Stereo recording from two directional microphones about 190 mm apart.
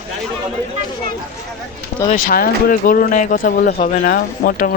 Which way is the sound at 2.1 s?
50° left (ahead or behind).